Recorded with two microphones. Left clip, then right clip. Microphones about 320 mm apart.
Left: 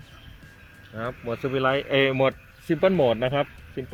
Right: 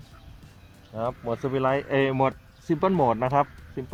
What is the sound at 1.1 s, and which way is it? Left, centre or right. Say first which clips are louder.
Speech: left 1 dB; centre.